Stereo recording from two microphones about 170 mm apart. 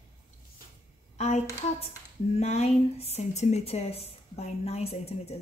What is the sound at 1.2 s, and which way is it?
A woman's voice, 40° left (ahead or behind).